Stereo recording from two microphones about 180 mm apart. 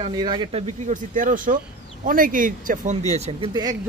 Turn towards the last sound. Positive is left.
turn(degrees=-20)  # may be behind; listen again after turning